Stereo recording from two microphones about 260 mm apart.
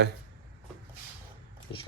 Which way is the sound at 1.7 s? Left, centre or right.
Centre.